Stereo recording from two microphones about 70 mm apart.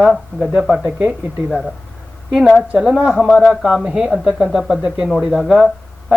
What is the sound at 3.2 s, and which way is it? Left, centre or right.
Speech, centre.